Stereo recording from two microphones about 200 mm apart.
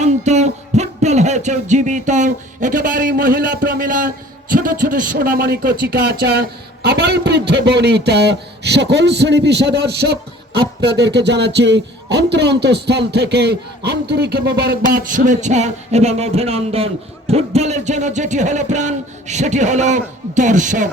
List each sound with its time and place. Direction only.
0.0 s a sound: 35° right (ahead or behind)
4.5 s a man's voice: 45° right (ahead or behind)
14.9 s speech: 40° right (ahead or behind)